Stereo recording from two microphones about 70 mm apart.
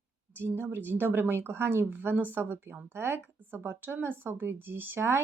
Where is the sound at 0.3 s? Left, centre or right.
Right.